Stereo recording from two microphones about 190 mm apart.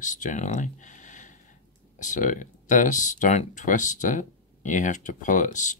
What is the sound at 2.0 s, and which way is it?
Speech, 40° left (ahead or behind).